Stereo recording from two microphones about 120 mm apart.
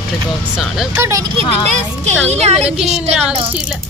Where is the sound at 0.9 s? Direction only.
20° right (ahead or behind).